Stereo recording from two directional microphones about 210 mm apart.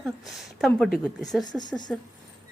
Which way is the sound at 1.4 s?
20° left (ahead or behind).